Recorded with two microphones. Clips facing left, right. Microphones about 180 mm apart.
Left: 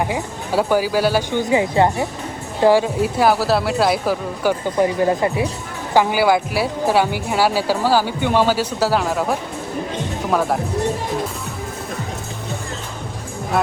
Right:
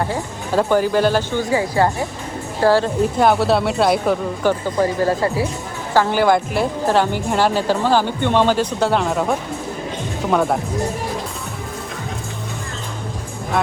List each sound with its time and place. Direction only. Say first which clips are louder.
0.0 s speech: even; 10° left (ahead or behind)
4.8 s speech: left 2 dB; 20° left (ahead or behind); by 10.6 s centre (ahead or behind)